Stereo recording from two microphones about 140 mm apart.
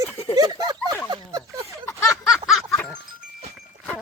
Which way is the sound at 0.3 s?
25° right (ahead or behind).